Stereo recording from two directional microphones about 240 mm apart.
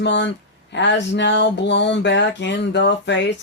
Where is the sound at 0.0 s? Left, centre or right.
Left.